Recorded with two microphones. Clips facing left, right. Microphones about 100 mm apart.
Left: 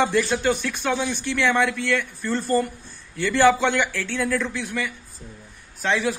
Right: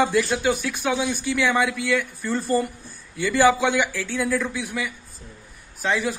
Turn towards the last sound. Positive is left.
turn(degrees=0)  # may be behind; listen again after turning